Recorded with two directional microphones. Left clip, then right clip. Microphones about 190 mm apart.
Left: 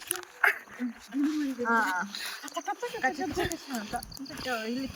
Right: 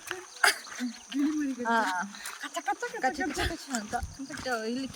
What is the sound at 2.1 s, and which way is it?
Speech, 15° right (ahead or behind).